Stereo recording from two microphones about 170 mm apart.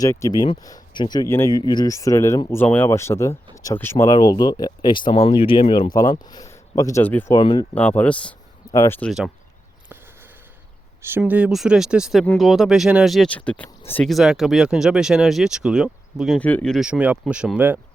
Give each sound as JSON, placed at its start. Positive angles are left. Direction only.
{"t": 0.0, "sound": "speech", "side_deg": 20}
{"t": 7.3, "sound": "speech", "side_deg": 25}
{"t": 7.8, "sound": "speech", "side_deg": 10}
{"t": 8.7, "sound": "speech", "side_deg": 20}
{"t": 9.0, "sound": "speech", "side_deg": 0}
{"t": 11.2, "sound": "speech", "side_deg": -5}
{"t": 14.1, "sound": "speech", "side_deg": 0}
{"t": 16.4, "sound": "speech", "side_deg": 10}